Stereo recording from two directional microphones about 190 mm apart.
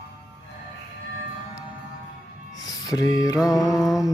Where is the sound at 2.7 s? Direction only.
20° left (ahead or behind).